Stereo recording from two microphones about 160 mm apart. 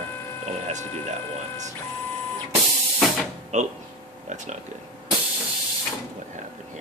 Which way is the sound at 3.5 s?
45° right (ahead or behind).